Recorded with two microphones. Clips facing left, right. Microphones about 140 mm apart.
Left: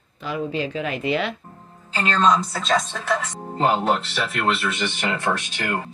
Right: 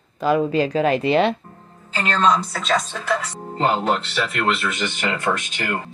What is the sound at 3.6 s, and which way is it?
Speech, 10° left (ahead or behind).